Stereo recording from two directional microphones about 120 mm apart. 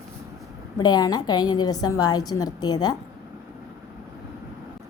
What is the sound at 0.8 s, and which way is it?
A woman's voice, 35° left (ahead or behind).